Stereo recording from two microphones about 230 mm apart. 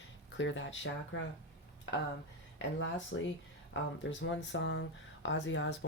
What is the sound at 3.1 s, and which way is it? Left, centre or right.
Speech, left.